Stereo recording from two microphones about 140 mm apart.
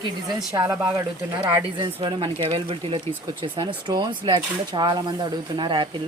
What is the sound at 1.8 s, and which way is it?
Speech, 35° right (ahead or behind).